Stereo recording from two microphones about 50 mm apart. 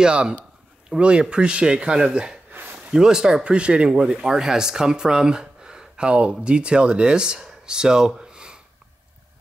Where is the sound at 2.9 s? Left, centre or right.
Centre.